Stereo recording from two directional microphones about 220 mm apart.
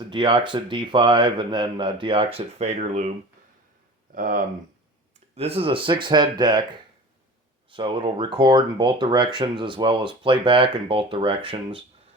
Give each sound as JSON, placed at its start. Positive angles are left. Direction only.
{"t": 0.1, "sound": "speech", "side_deg": -20}
{"t": 4.1, "sound": "speech", "side_deg": -40}
{"t": 5.3, "sound": "speech", "side_deg": -25}
{"t": 7.7, "sound": "speech", "side_deg": -25}